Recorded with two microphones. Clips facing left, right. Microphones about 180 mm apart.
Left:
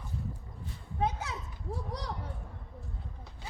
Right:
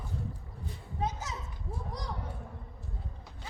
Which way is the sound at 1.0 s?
60° left (ahead or behind).